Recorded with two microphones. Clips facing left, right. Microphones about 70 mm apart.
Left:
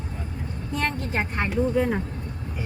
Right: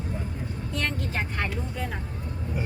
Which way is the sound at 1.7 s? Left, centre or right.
Left.